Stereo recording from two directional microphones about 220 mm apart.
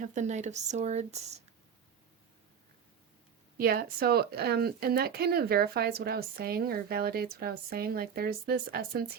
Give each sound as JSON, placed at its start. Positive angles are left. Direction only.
{"t": 0.0, "sound": "speech", "side_deg": -35}
{"t": 3.6, "sound": "speech", "side_deg": -45}